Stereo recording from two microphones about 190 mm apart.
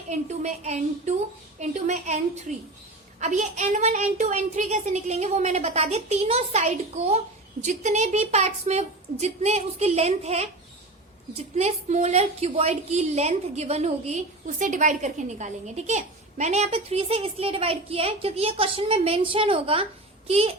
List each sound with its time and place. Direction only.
0.1 s a woman's voice: 35° right (ahead or behind)